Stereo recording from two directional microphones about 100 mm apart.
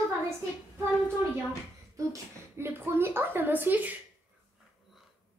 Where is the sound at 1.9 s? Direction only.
30° right (ahead or behind).